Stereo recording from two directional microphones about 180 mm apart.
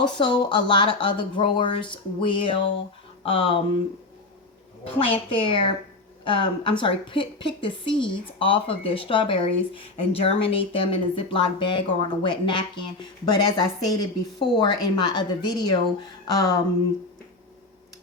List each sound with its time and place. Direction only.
0.2 s a woman's voice: 25° left (ahead or behind)
4.8 s a woman's voice: 30° left (ahead or behind)